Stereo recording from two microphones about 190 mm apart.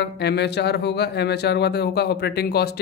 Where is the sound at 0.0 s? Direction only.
60° left (ahead or behind).